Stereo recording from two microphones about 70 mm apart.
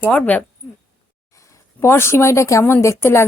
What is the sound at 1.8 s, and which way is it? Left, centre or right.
A woman's voice, left.